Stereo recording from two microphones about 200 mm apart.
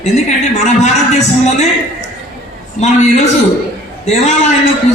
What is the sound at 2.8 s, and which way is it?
A man's voice, 35° left (ahead or behind).